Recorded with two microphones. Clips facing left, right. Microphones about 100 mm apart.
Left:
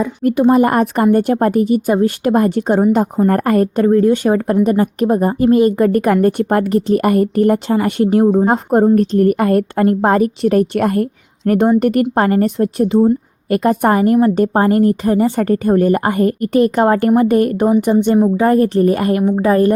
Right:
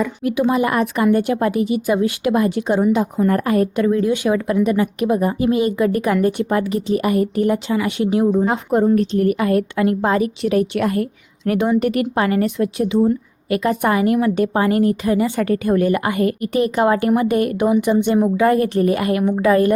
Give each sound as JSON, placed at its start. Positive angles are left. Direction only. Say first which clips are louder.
{"t": 0.2, "sound": "a woman's voice", "louder": "left 8 dB", "side_deg": 45}